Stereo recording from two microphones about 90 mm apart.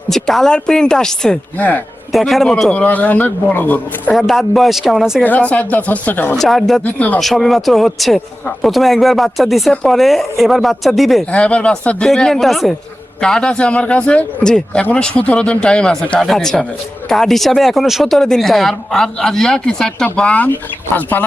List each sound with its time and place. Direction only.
0.1 s a man's voice: 5° left (ahead or behind)
1.5 s a man's voice: 15° left (ahead or behind)
2.1 s a man's voice: centre (ahead or behind); by 4.1 s 20° left (ahead or behind)
4.1 s speech: centre (ahead or behind)
5.2 s a man's voice: 15° left (ahead or behind)
6.3 s speech: centre (ahead or behind)
6.8 s a man's voice: 20° left (ahead or behind)
7.2 s speech: centre (ahead or behind)
11.3 s a man's voice: 15° left (ahead or behind)